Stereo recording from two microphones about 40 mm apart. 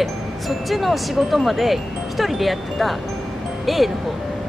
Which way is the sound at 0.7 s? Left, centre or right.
Centre.